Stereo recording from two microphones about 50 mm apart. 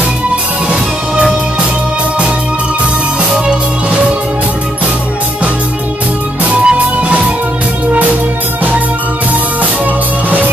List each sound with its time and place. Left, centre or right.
6.6 s music: centre